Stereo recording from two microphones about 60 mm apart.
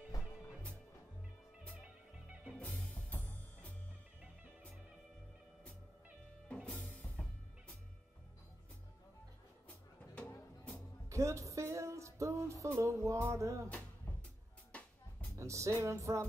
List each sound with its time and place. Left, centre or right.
2.1 s music: centre
2.5 s music: centre
2.9 s music: left
6.5 s music: centre
10.1 s music: left
11.1 s music: right
15.3 s music: right